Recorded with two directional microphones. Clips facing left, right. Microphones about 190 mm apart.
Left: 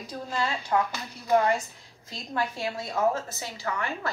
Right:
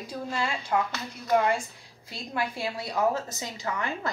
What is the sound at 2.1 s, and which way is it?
A woman's voice, 10° right (ahead or behind).